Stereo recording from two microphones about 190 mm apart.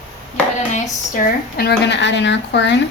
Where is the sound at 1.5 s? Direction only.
60° left (ahead or behind).